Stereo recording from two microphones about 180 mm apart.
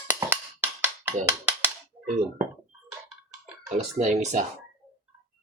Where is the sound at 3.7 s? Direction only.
40° right (ahead or behind).